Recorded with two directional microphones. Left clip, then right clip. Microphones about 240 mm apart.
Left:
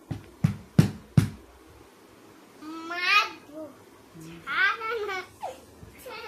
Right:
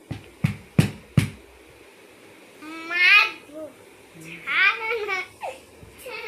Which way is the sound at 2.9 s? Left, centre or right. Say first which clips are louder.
Right 9 dB; centre.